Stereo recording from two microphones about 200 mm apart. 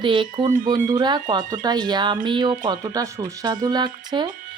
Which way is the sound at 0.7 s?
40° right (ahead or behind).